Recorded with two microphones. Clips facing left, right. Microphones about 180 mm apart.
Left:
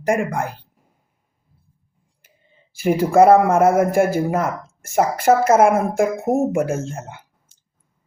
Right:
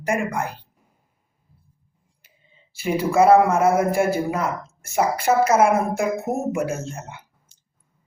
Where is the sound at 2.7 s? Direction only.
50° left (ahead or behind).